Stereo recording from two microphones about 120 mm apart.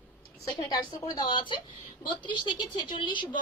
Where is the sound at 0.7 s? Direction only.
35° left (ahead or behind).